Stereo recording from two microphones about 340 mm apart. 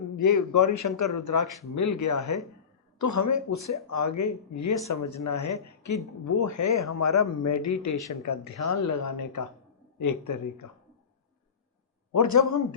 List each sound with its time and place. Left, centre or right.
0.2 s speech: left
9.0 s speech: left
12.1 s speech: left